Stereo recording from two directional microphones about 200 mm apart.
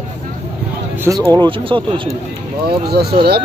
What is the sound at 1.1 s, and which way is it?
Speech, 20° right (ahead or behind).